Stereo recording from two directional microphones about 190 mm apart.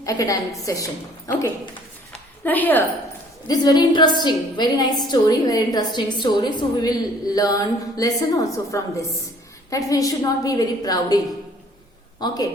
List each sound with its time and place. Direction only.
0.0 s a woman's voice: 20° left (ahead or behind)
2.4 s a woman's voice: 10° left (ahead or behind)
3.4 s a woman's voice: 20° left (ahead or behind)
12.2 s a woman's voice: 20° left (ahead or behind)